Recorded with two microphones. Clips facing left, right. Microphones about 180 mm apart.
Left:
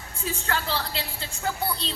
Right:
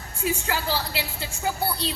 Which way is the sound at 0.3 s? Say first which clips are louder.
Right 3 dB; 15° right (ahead or behind).